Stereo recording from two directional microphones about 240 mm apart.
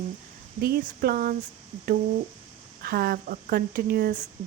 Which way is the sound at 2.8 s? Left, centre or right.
Right.